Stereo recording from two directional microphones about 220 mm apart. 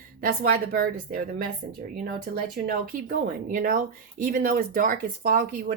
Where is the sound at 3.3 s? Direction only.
40° right (ahead or behind).